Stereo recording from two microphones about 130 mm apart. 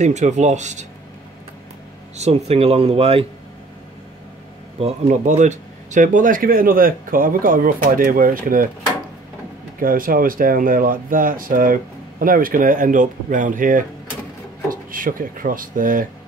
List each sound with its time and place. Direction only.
0.0 s speech: 65° right (ahead or behind)
2.1 s speech: 60° right (ahead or behind)
4.7 s speech: 60° right (ahead or behind); by 8.6 s 90° right
9.8 s speech: 90° right